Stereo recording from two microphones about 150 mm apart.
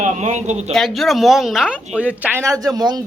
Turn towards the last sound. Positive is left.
turn(degrees=-25)  # may be behind; listen again after turning